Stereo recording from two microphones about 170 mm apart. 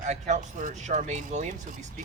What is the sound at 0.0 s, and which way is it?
Speech, 45° right (ahead or behind).